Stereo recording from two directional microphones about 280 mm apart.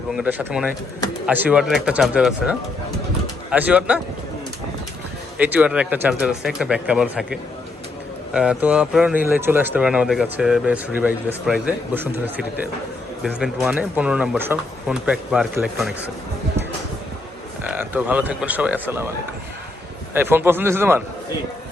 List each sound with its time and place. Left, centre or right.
0.1 s speech: centre
5.4 s speech: centre
17.7 s speech: centre
20.1 s a man's voice: centre